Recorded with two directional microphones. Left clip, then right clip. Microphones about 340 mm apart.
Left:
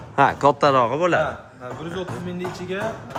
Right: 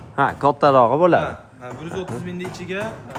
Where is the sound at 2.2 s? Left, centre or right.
Centre.